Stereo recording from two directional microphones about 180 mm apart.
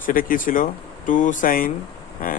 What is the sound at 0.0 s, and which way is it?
Speech, 50° left (ahead or behind).